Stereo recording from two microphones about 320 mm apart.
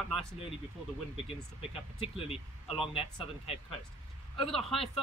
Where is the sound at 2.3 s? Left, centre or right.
Centre.